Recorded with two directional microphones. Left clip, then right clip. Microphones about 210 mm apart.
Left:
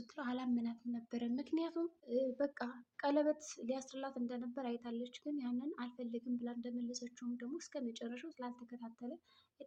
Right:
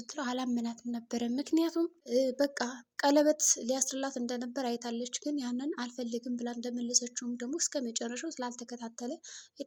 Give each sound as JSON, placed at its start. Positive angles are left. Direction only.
{"t": 0.2, "sound": "a woman's voice", "side_deg": -45}